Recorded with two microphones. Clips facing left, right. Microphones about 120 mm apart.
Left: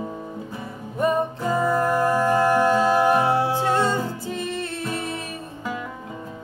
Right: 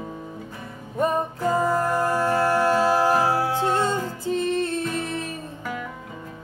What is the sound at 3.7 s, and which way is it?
Music, 20° right (ahead or behind).